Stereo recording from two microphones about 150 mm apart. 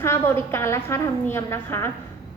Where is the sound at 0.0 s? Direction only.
15° left (ahead or behind).